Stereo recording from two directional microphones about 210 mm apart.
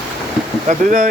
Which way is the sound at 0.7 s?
40° right (ahead or behind).